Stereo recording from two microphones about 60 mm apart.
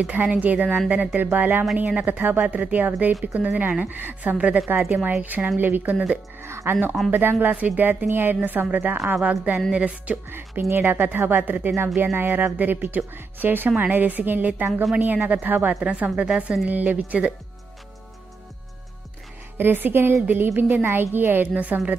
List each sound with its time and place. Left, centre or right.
0.0 s a woman's voice: right
4.6 s speech: right
6.4 s speech: right
7.1 s a woman's voice: right
10.8 s speech: right
15.1 s a woman's voice: centre
15.4 s a woman's voice: right
15.7 s a woman's voice: centre
19.5 s speech: right